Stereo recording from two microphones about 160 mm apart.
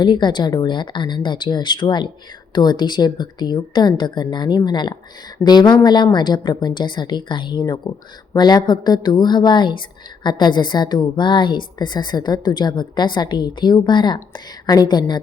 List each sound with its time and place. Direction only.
0.0 s a woman's voice: 30° left (ahead or behind)